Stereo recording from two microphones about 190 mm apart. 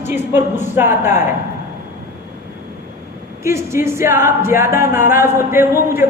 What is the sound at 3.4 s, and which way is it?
A man's voice, 15° right (ahead or behind).